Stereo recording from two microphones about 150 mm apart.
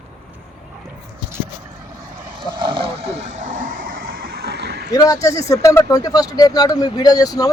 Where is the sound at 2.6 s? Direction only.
35° right (ahead or behind).